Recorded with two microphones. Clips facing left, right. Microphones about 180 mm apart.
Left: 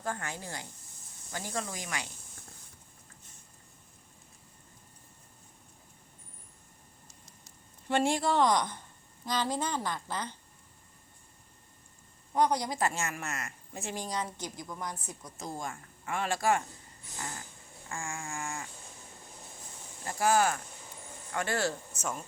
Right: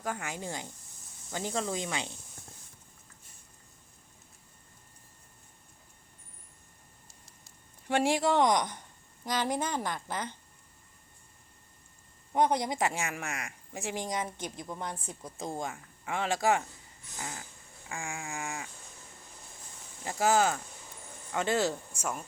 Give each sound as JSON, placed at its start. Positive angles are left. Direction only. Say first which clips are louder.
{"t": 0.0, "sound": "speech", "louder": "right 1 dB", "side_deg": -10}
{"t": 7.9, "sound": "speech", "louder": "right 1 dB", "side_deg": -15}
{"t": 12.3, "sound": "speech", "louder": "right 1 dB", "side_deg": -25}
{"t": 17.9, "sound": "speech", "louder": "even", "side_deg": -15}
{"t": 20.1, "sound": "speech", "louder": "right 1 dB", "side_deg": -20}